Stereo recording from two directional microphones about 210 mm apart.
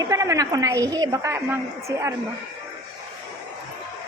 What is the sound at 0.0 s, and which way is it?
A woman's voice, 15° right (ahead or behind).